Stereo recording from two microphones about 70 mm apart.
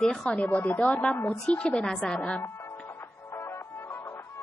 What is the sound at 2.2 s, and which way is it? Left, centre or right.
Speech, centre.